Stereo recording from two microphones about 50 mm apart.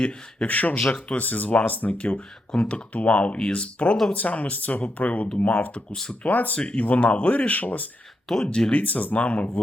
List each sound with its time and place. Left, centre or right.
0.0 s speech: centre
0.4 s speech: left
0.8 s speech: centre
1.0 s speech: left
5.9 s speech: centre
6.2 s speech: left
8.4 s speech: centre
8.8 s speech: left